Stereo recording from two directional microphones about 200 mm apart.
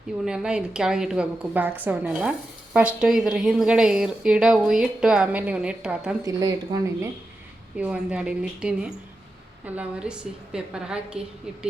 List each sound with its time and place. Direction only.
0.3 s a woman's voice: 5° right (ahead or behind)
6.2 s speech: 20° right (ahead or behind)
7.8 s a woman's voice: 5° right (ahead or behind)